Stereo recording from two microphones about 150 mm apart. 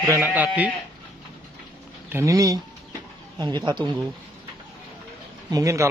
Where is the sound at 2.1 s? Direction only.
20° right (ahead or behind).